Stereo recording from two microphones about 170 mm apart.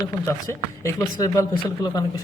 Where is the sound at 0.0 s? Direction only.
20° left (ahead or behind).